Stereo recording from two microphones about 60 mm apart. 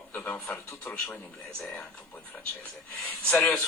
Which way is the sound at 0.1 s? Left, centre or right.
Left.